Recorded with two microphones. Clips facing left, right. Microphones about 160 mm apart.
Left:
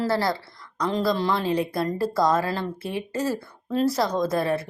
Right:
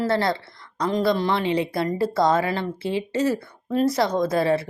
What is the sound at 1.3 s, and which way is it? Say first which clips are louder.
Speech: right 1 dB; 80° right.